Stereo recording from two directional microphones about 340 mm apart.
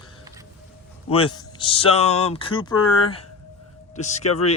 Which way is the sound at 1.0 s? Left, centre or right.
Centre.